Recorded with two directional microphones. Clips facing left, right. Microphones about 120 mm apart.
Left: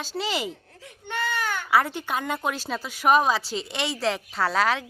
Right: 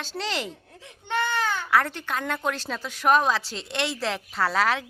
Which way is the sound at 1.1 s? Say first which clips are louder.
Right 2 dB; 25° right (ahead or behind).